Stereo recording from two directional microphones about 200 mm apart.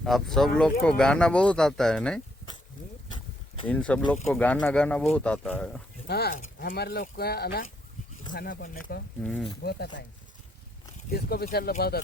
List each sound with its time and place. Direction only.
0.0 s speech: centre (ahead or behind)
3.7 s speech: 5° left (ahead or behind)
6.1 s speech: 50° left (ahead or behind)
9.2 s speech: 5° left (ahead or behind)
9.6 s speech: 50° left (ahead or behind)
11.1 s speech: 50° left (ahead or behind)